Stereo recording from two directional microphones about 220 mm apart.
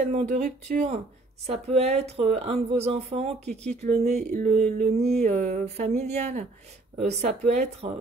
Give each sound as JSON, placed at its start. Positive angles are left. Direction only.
{"t": 0.1, "sound": "speech", "side_deg": -35}